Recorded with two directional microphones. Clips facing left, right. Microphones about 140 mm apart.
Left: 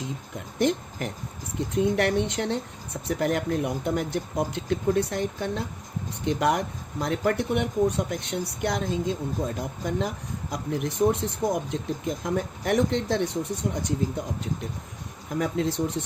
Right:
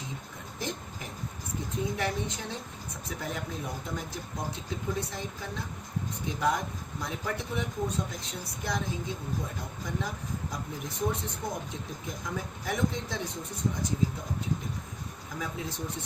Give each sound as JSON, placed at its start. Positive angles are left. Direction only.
{"t": 0.3, "sound": "speech", "side_deg": 75}